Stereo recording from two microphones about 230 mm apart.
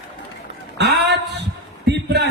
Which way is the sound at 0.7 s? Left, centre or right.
Right.